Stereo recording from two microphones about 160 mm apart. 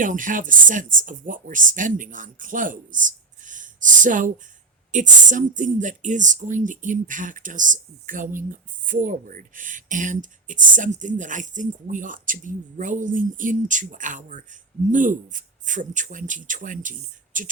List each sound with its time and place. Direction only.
0.0 s speech: 55° right (ahead or behind)